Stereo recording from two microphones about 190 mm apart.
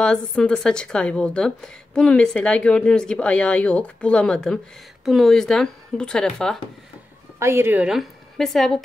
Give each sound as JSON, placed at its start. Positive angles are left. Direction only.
{"t": 0.0, "sound": "speech", "side_deg": 5}
{"t": 7.3, "sound": "a woman's voice", "side_deg": -15}